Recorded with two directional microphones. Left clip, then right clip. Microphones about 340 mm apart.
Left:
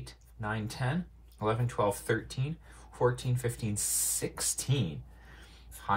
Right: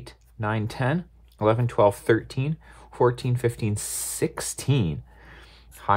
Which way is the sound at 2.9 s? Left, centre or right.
Right.